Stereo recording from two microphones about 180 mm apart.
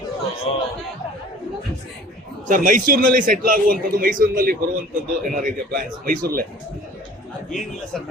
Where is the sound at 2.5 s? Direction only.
50° right (ahead or behind).